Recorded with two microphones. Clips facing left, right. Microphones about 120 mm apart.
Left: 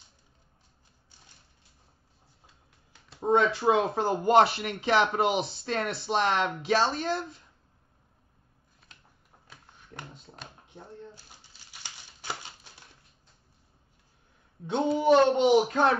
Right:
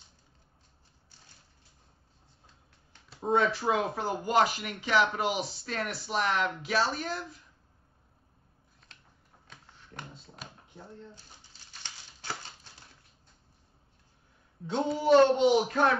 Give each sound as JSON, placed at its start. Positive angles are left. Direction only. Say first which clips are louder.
{"t": 2.4, "sound": "finger snapping", "louder": "left 1 dB", "side_deg": 5}
{"t": 3.3, "sound": "speech", "louder": "left 3 dB", "side_deg": 25}
{"t": 9.5, "sound": "a sound", "louder": "left 2 dB", "side_deg": 5}
{"t": 11.7, "sound": "crumpling", "louder": "left 1 dB", "side_deg": 10}
{"t": 14.7, "sound": "speech", "louder": "left 1 dB", "side_deg": 20}